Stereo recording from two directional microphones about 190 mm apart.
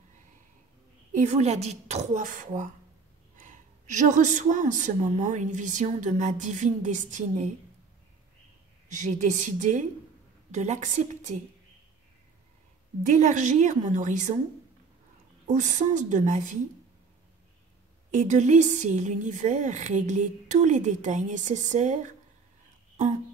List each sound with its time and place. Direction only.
1.1 s a woman's voice: 35° right (ahead or behind)
8.8 s a woman's voice: 40° right (ahead or behind)
13.0 s a woman's voice: 40° right (ahead or behind)
15.4 s a woman's voice: 40° right (ahead or behind)
18.1 s a woman's voice: 40° right (ahead or behind)